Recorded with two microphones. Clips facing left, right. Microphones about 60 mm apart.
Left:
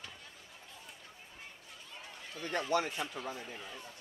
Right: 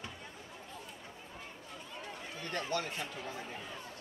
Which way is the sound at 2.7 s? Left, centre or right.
Centre.